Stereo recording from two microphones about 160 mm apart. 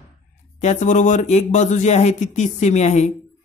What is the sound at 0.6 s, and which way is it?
Speech, 50° left (ahead or behind).